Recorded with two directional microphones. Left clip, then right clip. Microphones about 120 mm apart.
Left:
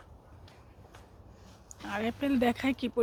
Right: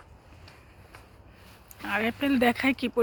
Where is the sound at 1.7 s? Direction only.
25° right (ahead or behind).